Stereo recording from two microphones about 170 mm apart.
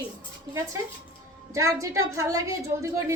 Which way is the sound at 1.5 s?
20° right (ahead or behind).